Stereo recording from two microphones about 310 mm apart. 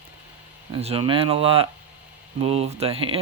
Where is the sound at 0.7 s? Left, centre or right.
Centre.